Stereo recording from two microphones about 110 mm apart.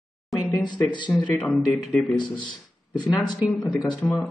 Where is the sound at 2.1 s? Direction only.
45° left (ahead or behind).